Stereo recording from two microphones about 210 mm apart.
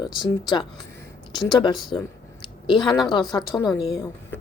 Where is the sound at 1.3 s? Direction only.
20° left (ahead or behind).